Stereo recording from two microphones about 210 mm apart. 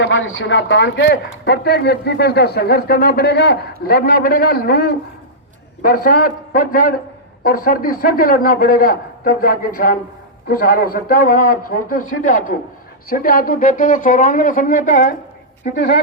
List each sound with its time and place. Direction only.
0.0 s speech: 65° left (ahead or behind); by 15.0 s 40° left (ahead or behind)
15.7 s speech: 55° left (ahead or behind)